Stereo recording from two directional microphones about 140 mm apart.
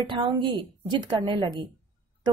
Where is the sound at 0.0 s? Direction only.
35° right (ahead or behind).